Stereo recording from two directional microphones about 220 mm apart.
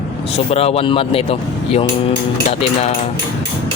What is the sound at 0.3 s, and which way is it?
Speech, 25° left (ahead or behind).